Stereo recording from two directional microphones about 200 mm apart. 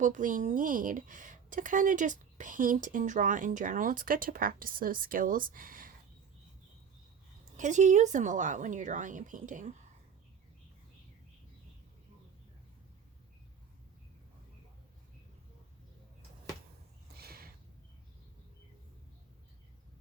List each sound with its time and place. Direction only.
0.0 s speech: 40° right (ahead or behind)
7.5 s speech: 40° right (ahead or behind)
17.2 s a sound: 50° right (ahead or behind)